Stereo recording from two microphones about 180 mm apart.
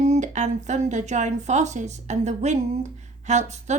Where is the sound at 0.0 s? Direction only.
40° right (ahead or behind).